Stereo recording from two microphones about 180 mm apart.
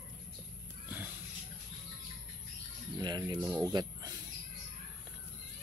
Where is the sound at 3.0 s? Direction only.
25° right (ahead or behind).